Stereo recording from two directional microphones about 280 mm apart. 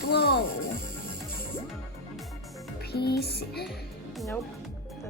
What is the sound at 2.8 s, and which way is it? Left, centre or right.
Music, left.